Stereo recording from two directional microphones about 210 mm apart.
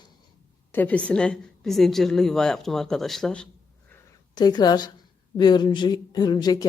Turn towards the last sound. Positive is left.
turn(degrees=20)  # may be behind; listen again after turning